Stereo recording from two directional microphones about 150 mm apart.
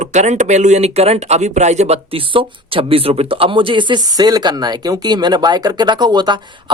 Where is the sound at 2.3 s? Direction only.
40° right (ahead or behind).